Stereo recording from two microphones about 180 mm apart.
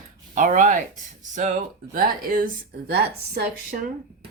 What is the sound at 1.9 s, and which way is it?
A woman's voice, 50° right (ahead or behind).